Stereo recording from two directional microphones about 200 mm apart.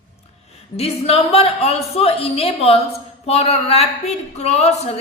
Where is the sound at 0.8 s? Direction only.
30° left (ahead or behind).